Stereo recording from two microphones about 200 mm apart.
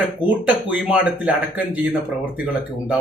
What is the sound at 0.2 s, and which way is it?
A man's voice, 5° right (ahead or behind).